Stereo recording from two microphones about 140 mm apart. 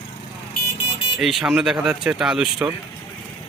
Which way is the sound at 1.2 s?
Centre (ahead or behind).